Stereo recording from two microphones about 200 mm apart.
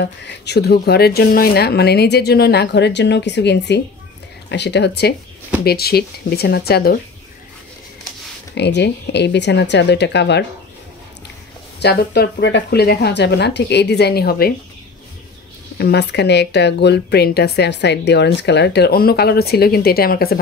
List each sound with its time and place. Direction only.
0.0 s speech: 55° left (ahead or behind)
8.5 s speech: 60° left (ahead or behind)
11.8 s speech: 55° left (ahead or behind)
15.8 s speech: 55° left (ahead or behind)